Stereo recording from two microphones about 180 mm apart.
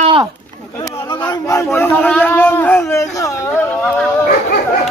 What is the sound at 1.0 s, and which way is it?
Speech, 20° left (ahead or behind).